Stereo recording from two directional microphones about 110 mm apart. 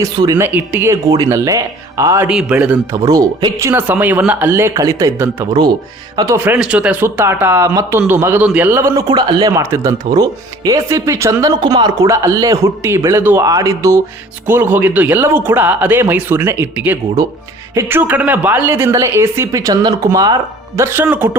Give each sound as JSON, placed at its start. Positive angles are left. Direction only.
{"t": 0.0, "sound": "speech", "side_deg": -30}
{"t": 0.4, "sound": "speech", "side_deg": -20}
{"t": 0.9, "sound": "speech", "side_deg": -35}
{"t": 2.2, "sound": "speech", "side_deg": -5}
{"t": 2.9, "sound": "speech", "side_deg": -35}
{"t": 3.7, "sound": "speech", "side_deg": -15}
{"t": 5.1, "sound": "speech", "side_deg": -20}
{"t": 9.0, "sound": "speech", "side_deg": -40}
{"t": 9.5, "sound": "speech", "side_deg": -25}
{"t": 11.6, "sound": "speech", "side_deg": -40}
{"t": 20.8, "sound": "speech", "side_deg": -20}